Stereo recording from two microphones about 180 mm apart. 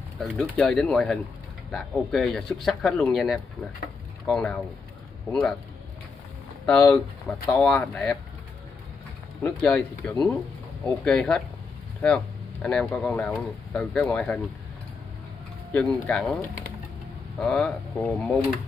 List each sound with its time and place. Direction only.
0.2 s speech: centre (ahead or behind)
6.7 s speech: 5° left (ahead or behind)
9.4 s speech: 10° left (ahead or behind)
12.6 s speech: 5° left (ahead or behind)
15.7 s speech: 5° left (ahead or behind)